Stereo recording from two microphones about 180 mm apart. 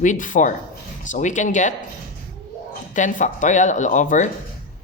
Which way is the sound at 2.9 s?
45° left (ahead or behind).